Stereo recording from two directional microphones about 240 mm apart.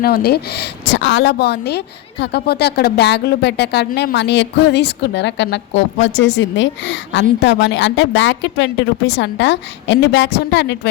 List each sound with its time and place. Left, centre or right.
0.0 s a woman's voice: left